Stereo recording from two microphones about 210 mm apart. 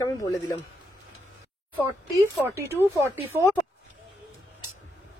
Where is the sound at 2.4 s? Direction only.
10° right (ahead or behind).